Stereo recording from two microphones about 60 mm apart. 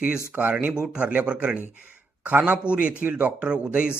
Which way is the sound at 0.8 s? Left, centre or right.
Centre.